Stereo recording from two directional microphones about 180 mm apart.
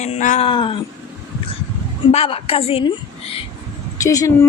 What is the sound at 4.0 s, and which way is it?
Speech, 20° left (ahead or behind).